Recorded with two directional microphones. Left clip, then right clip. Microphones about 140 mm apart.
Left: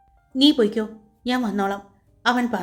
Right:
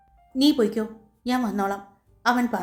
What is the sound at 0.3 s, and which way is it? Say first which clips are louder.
A woman's voice: left 3 dB; 20° left (ahead or behind).